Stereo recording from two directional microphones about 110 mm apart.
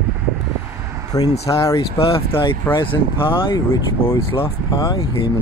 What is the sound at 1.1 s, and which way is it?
Speech, 35° left (ahead or behind).